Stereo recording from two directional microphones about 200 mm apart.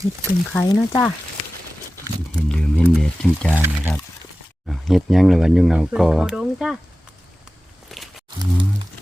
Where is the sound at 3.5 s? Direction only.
10° right (ahead or behind).